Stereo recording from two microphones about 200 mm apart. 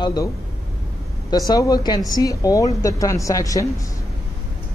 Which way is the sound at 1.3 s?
20° left (ahead or behind).